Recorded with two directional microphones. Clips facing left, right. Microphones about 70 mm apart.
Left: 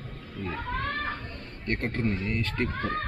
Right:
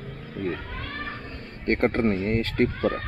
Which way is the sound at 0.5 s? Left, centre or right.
Left.